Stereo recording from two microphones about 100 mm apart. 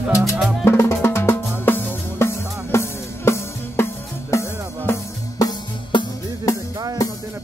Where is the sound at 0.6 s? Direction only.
25° left (ahead or behind).